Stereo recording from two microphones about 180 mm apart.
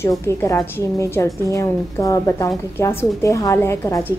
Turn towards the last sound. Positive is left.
turn(degrees=15)  # may be behind; listen again after turning